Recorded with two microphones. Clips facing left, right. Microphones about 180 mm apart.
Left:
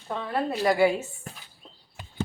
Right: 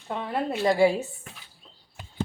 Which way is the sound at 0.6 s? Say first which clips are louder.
Right 1 dB; 30° right (ahead or behind).